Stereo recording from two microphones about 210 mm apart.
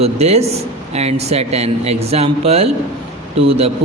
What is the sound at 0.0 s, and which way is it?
A man's voice, 30° right (ahead or behind).